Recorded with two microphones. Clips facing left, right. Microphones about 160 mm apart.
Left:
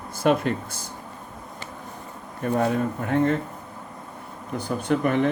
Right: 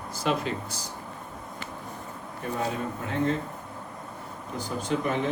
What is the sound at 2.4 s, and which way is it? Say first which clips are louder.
Speech: left 8 dB; 55° left (ahead or behind).